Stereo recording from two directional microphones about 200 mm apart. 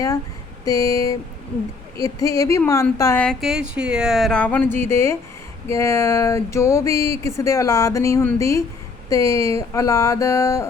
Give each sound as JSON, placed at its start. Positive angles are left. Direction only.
{"t": 0.6, "sound": "speech", "side_deg": 15}